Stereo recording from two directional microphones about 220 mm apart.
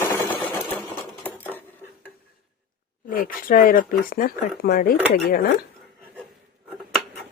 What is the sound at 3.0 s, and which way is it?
Speech, 40° left (ahead or behind).